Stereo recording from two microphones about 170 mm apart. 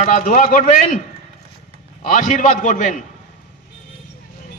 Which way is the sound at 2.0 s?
45° left (ahead or behind).